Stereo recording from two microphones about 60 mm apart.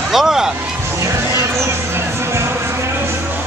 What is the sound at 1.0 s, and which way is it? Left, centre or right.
Music, right.